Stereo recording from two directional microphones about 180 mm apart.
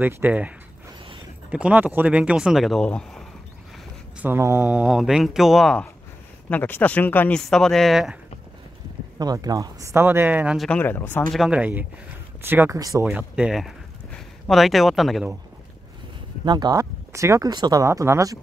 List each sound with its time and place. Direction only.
0.0 s speech: 10° right (ahead or behind)
1.5 s speech: 5° right (ahead or behind)
4.2 s speech: 15° right (ahead or behind)
9.2 s speech: 20° right (ahead or behind); by 10.7 s 5° right (ahead or behind)
10.7 s speech: 10° left (ahead or behind)
11.3 s speech: 5° right (ahead or behind); by 13.1 s 20° right (ahead or behind)
13.1 s speech: 5° right (ahead or behind)
16.4 s speech: 25° right (ahead or behind)